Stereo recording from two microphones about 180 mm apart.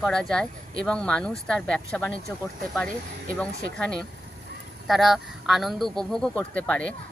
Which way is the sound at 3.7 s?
5° left (ahead or behind).